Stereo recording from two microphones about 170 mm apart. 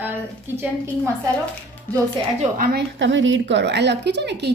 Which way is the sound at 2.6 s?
65° right (ahead or behind).